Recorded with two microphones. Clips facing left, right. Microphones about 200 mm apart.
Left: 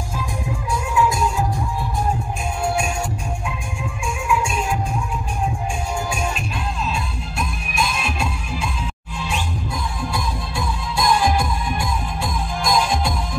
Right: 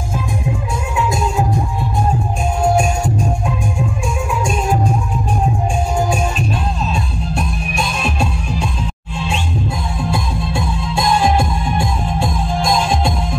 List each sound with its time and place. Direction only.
2.6 s music: 40° right (ahead or behind)
4.3 s music: 40° right (ahead or behind)
6.9 s music: 35° right (ahead or behind)
10.1 s music: 25° right (ahead or behind)